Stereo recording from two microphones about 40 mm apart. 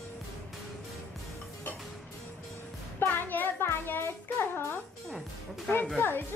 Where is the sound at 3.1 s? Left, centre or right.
Left.